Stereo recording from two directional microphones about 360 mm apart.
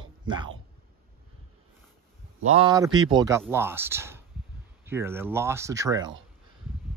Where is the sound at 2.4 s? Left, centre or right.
Centre.